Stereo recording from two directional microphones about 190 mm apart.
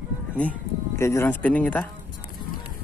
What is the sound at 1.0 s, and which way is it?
Speech, 15° left (ahead or behind).